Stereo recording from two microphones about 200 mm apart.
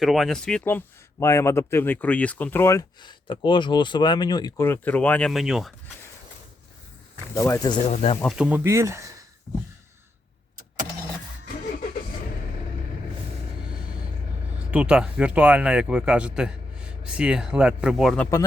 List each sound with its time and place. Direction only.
0.0 s a man's voice: centre (ahead or behind)
7.3 s a man's voice: 15° left (ahead or behind)
7.9 s speech: 30° left (ahead or behind)
8.2 s speech: 5° right (ahead or behind)
14.7 s speech: 5° right (ahead or behind)